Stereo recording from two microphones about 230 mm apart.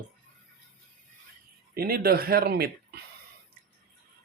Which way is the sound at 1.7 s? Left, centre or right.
Right.